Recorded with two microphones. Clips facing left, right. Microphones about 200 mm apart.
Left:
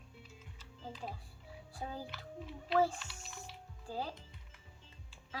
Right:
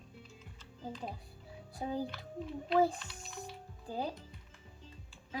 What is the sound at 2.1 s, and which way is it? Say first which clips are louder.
Speech: right 5 dB; centre (ahead or behind).